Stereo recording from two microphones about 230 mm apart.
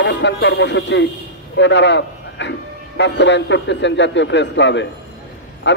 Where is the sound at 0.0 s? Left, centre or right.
Left.